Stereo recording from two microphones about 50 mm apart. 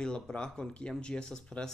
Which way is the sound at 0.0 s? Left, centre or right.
Centre.